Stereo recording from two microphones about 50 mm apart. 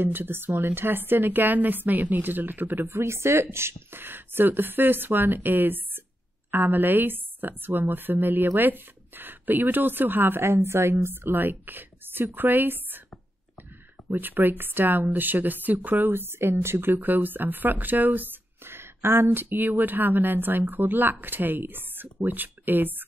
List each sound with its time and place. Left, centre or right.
0.0 s speech: right
2.9 s speech: right
14.1 s speech: right
18.7 s speech: right